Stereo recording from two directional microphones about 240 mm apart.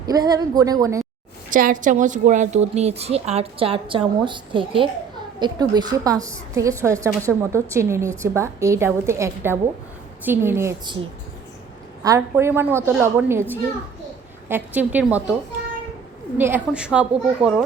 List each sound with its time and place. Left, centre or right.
0.0 s a woman's voice: centre
1.5 s a woman's voice: right; by 10.9 s centre
12.0 s a woman's voice: centre
14.4 s a woman's voice: centre
16.4 s a woman's voice: centre